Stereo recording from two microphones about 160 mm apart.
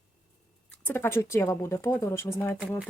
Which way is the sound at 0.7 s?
10° left (ahead or behind).